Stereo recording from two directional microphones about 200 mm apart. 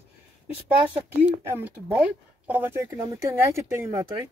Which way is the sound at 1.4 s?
10° right (ahead or behind).